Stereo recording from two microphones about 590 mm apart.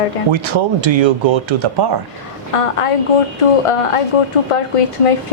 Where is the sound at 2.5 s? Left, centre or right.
Left.